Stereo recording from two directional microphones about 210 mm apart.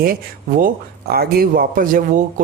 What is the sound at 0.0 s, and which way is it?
A man's voice, 45° right (ahead or behind).